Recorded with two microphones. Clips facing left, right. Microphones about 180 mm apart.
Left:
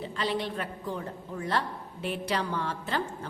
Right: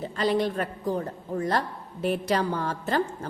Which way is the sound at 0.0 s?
45° right (ahead or behind).